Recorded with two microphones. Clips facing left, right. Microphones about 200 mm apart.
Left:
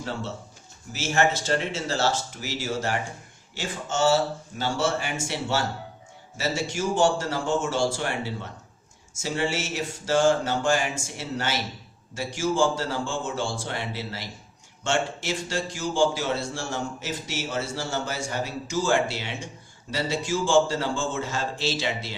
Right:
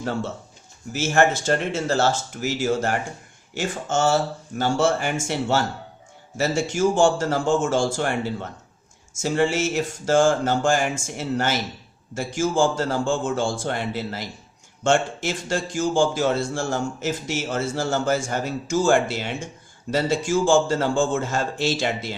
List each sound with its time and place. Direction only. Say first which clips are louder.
0.9 s speech: right 4 dB; 50° right (ahead or behind)
9.2 s speech: right 6 dB; 50° right (ahead or behind)